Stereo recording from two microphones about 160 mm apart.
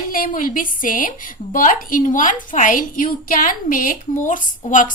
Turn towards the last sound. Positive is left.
turn(degrees=55)  # may be behind; listen again after turning